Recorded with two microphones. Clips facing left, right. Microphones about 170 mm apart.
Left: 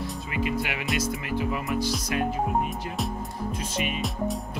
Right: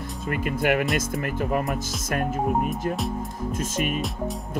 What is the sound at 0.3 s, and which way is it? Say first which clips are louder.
Speech: right 6 dB; 50° right (ahead or behind).